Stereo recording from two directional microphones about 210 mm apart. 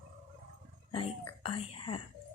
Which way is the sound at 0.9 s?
25° left (ahead or behind).